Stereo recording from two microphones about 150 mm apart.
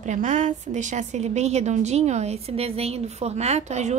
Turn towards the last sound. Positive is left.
turn(degrees=-50)  # may be behind; listen again after turning